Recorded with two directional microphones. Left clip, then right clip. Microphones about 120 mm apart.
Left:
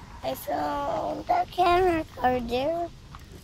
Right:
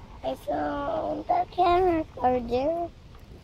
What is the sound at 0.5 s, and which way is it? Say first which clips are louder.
Speech: left 1 dB; 40° right (ahead or behind).